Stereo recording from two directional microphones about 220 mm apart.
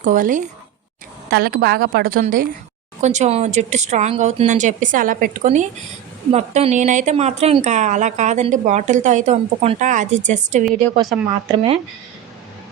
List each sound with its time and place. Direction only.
0.0 s a woman's voice: 35° right (ahead or behind)
11.1 s speech: centre (ahead or behind)